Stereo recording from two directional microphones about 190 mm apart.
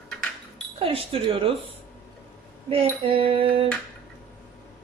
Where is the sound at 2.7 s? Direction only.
30° right (ahead or behind).